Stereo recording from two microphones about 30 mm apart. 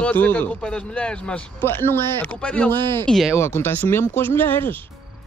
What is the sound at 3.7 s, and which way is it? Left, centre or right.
Speech, left.